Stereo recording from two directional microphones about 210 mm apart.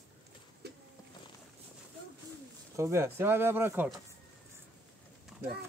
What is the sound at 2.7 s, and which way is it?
Speech, 10° right (ahead or behind).